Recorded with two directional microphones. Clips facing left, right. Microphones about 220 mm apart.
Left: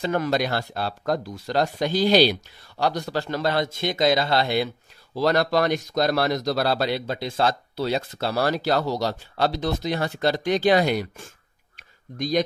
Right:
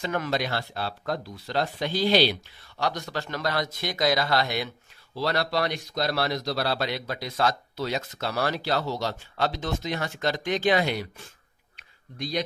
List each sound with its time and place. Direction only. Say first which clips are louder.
0.0 s a man's voice: left 5 dB; 35° left (ahead or behind)
5.1 s speech: left 6 dB; 45° left (ahead or behind)
6.9 s speech: left 5 dB; 30° left (ahead or behind); by 11.2 s 45° left (ahead or behind)